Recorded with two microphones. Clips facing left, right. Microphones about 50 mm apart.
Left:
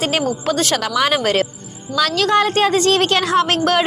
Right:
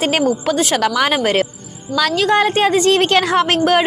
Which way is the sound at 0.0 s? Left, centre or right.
Right.